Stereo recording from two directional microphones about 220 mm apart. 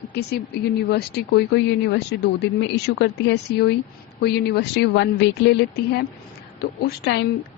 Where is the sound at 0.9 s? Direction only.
50° left (ahead or behind).